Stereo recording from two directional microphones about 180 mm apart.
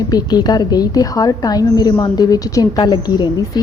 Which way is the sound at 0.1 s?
20° left (ahead or behind).